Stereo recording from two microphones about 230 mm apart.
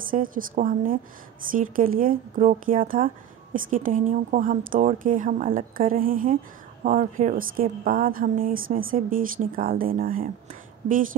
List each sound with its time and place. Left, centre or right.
0.0 s a woman's voice: right